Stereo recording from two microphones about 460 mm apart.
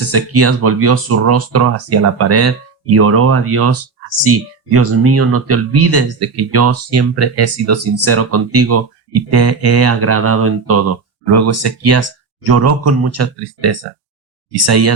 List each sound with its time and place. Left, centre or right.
0.1 s speech: right